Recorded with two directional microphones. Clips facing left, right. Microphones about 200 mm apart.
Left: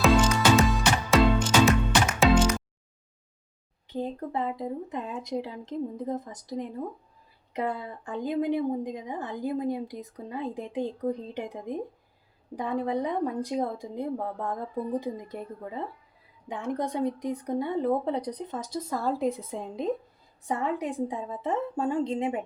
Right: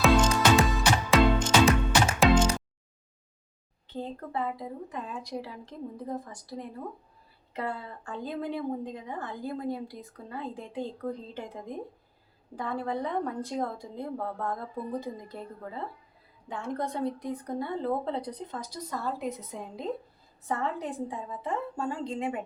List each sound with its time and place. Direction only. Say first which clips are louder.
0.0 s music: left 1 dB; centre (ahead or behind)
3.8 s a woman's voice: left 5 dB; 15° left (ahead or behind)